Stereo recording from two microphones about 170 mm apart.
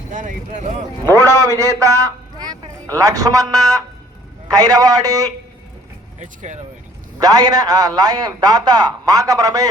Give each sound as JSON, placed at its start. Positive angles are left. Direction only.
{"t": 0.1, "sound": "speech", "side_deg": -45}
{"t": 1.1, "sound": "a man's voice", "side_deg": -20}
{"t": 6.1, "sound": "speech", "side_deg": -45}
{"t": 7.2, "sound": "a man's voice", "side_deg": -20}